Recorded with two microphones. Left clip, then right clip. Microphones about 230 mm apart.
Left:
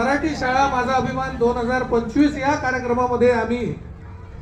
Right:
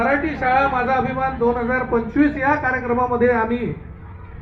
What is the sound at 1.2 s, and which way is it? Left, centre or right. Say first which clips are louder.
A man's voice: right 1 dB; left.